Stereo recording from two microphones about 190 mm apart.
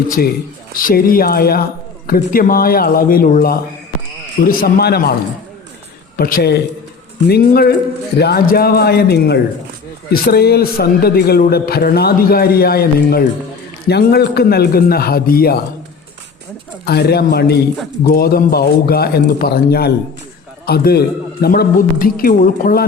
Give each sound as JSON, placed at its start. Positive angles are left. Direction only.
{"t": 0.8, "sound": "a man's voice", "side_deg": 50}
{"t": 6.1, "sound": "a man's voice", "side_deg": 50}
{"t": 16.8, "sound": "a man's voice", "side_deg": 60}